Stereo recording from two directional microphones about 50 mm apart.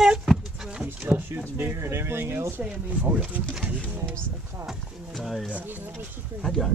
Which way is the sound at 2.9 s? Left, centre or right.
Right.